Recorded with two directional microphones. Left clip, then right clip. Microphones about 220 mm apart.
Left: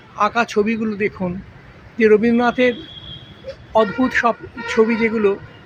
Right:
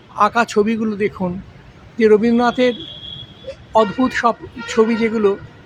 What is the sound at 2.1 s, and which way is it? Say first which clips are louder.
Speech: right 1 dB; 10° right (ahead or behind).